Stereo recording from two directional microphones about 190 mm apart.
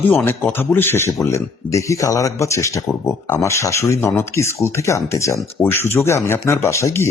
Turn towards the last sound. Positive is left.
turn(degrees=15)  # may be behind; listen again after turning